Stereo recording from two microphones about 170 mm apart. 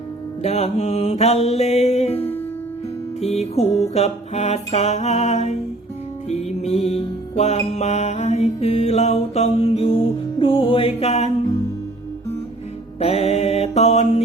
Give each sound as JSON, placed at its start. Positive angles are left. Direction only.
{"t": 0.4, "sound": "music", "side_deg": 40}
{"t": 13.0, "sound": "mantra", "side_deg": 35}